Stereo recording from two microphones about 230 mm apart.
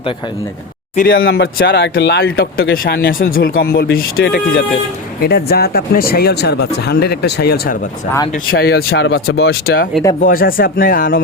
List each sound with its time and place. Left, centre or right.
1.1 s speech: left